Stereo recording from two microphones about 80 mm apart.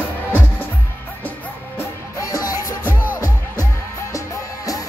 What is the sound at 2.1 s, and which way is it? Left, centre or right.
Music, left.